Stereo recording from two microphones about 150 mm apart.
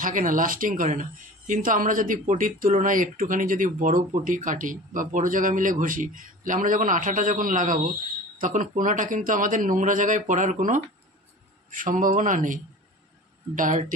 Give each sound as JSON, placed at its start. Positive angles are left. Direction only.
{"t": 0.0, "sound": "speech", "side_deg": -65}
{"t": 13.6, "sound": "speech", "side_deg": -60}